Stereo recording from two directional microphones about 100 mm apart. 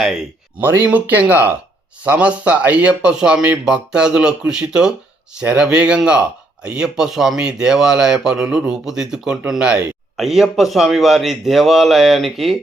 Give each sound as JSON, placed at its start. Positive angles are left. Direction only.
{"t": 0.6, "sound": "speech", "side_deg": -20}